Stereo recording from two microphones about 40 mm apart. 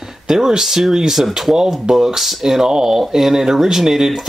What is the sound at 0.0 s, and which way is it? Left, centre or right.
Speech, centre.